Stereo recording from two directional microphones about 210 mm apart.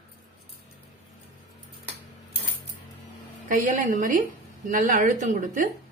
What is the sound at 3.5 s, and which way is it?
Speech, 40° right (ahead or behind).